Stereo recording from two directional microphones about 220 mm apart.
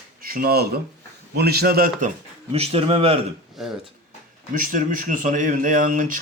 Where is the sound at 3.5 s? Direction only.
Centre (ahead or behind).